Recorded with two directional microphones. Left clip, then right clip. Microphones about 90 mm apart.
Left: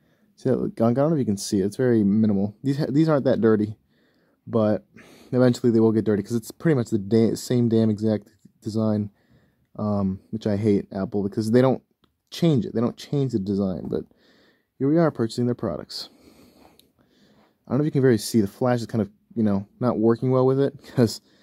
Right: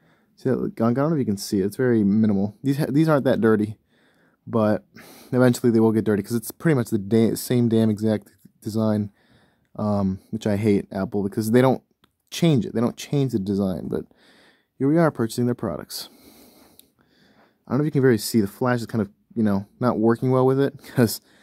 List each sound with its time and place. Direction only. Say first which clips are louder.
0.4 s speech: left 1 dB; 10° right (ahead or behind); by 16.1 s 30° right (ahead or behind)
17.6 s speech: right 1 dB; 20° right (ahead or behind)